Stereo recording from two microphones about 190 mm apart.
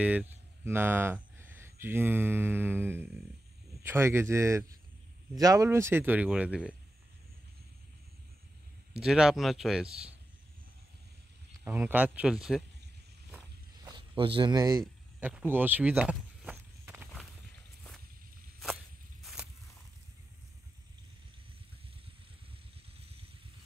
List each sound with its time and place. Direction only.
0.0 s speech: 10° right (ahead or behind)
9.0 s speech: 5° right (ahead or behind)
11.6 s speech: 10° right (ahead or behind)
13.8 s a sound: 25° right (ahead or behind)
15.2 s walk: 10° right (ahead or behind)
22.9 s vehicle: 30° right (ahead or behind)